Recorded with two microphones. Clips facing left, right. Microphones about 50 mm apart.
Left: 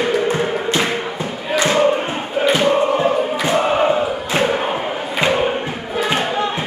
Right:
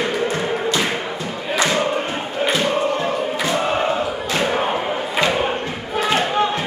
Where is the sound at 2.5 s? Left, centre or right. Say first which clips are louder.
Left 5 dB; left.